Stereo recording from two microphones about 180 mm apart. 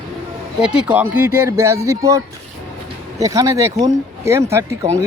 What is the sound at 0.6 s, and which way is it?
Speech, 5° right (ahead or behind).